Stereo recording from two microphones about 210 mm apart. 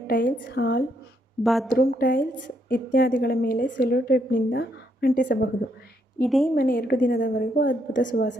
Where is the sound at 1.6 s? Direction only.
45° left (ahead or behind).